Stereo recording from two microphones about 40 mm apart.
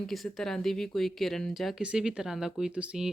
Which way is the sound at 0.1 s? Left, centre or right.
Centre.